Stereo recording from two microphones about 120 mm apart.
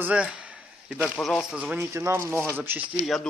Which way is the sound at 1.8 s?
20° right (ahead or behind).